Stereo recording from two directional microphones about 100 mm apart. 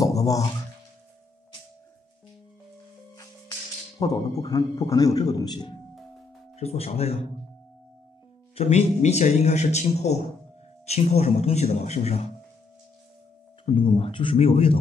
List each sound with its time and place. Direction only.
0.0 s a sound: 35° left (ahead or behind)
4.0 s a man's voice: 35° left (ahead or behind)
6.5 s a man's voice: 90° left
8.5 s a man's voice: 90° left
13.7 s speech: 55° left (ahead or behind)